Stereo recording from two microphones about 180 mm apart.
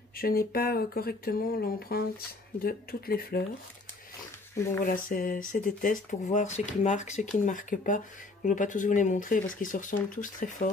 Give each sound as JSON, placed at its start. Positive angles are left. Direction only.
{"t": 0.2, "sound": "speech", "side_deg": 55}
{"t": 4.8, "sound": "speech", "side_deg": 50}